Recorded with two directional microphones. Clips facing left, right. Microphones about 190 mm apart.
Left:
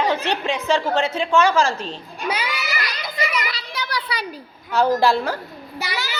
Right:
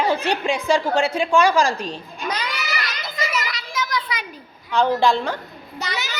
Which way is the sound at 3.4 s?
30° left (ahead or behind).